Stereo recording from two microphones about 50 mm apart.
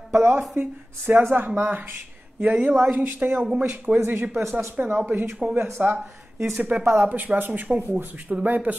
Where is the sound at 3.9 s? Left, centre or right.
Right.